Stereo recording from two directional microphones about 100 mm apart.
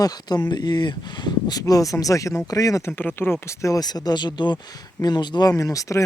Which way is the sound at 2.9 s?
20° left (ahead or behind).